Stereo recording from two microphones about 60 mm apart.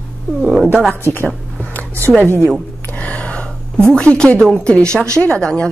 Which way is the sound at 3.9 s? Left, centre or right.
Centre.